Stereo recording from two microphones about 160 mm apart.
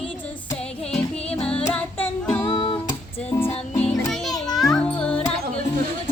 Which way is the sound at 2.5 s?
30° left (ahead or behind).